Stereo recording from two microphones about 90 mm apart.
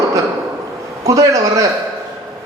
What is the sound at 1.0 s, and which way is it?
Speech, 35° right (ahead or behind).